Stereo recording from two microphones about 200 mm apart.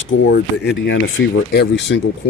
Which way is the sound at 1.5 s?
60° left (ahead or behind).